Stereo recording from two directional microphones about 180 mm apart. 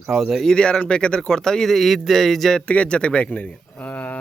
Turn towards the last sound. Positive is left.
turn(degrees=5)  # may be behind; listen again after turning